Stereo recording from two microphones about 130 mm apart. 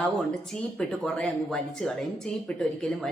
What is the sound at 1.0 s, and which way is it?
Speech, 5° left (ahead or behind).